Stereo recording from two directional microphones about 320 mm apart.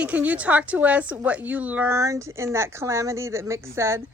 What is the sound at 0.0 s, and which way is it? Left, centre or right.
Speech, centre.